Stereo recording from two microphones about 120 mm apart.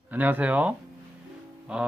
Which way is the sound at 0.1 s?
15° right (ahead or behind).